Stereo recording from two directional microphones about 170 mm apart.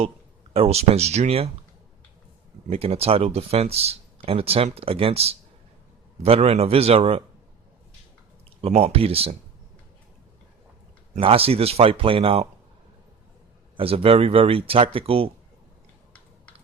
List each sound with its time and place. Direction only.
0.5 s speech: 35° right (ahead or behind)
2.6 s speech: 35° right (ahead or behind)
8.4 s speech: 35° right (ahead or behind)
11.1 s speech: 35° right (ahead or behind)
13.7 s speech: 35° right (ahead or behind)